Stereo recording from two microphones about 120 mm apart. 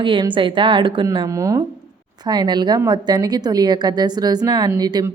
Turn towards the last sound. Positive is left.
turn(degrees=-35)  # may be behind; listen again after turning